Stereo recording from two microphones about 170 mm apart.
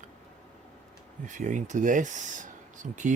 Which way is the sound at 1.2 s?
45° right (ahead or behind).